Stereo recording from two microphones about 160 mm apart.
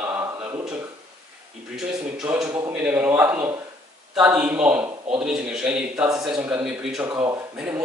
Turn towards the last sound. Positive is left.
turn(degrees=-5)  # may be behind; listen again after turning